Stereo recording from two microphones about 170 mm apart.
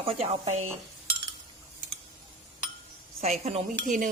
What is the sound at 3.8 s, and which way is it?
Speech, 50° right (ahead or behind).